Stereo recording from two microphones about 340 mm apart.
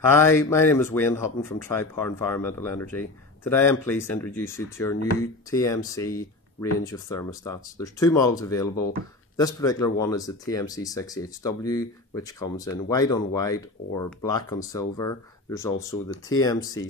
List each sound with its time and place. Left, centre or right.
0.1 s speech: centre